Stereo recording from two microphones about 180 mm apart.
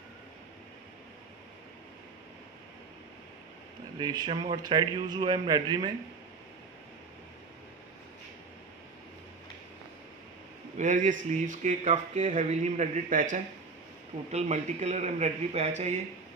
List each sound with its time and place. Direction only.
4.0 s a man's voice: 25° right (ahead or behind)
10.8 s a man's voice: 45° right (ahead or behind)